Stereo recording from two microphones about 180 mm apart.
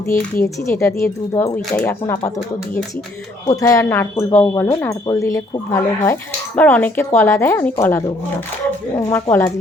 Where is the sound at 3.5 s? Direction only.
20° left (ahead or behind).